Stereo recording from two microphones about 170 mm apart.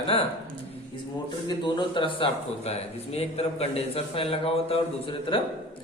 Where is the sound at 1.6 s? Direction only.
30° left (ahead or behind).